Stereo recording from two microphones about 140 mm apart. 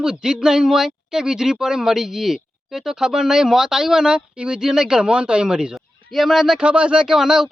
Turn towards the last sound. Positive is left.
turn(degrees=-5)  # may be behind; listen again after turning